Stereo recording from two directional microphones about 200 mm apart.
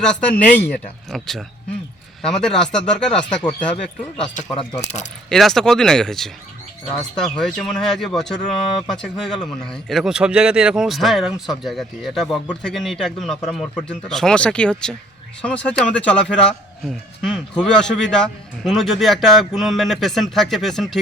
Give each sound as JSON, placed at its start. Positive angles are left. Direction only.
{"t": 0.0, "sound": "speech", "side_deg": 5}
{"t": 4.5, "sound": "speech", "side_deg": 30}
{"t": 5.3, "sound": "speech", "side_deg": 0}
{"t": 7.3, "sound": "a man's voice", "side_deg": 5}